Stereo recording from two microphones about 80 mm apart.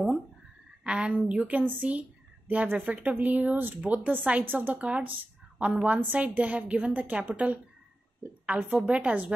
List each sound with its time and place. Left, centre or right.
0.8 s a woman's voice: centre